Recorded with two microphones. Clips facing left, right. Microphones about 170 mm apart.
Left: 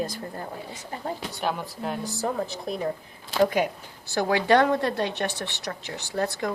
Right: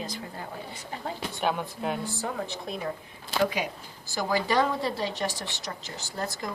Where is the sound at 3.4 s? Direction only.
50° left (ahead or behind).